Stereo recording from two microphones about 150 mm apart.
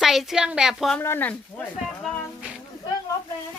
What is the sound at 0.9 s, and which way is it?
Speech, 15° left (ahead or behind).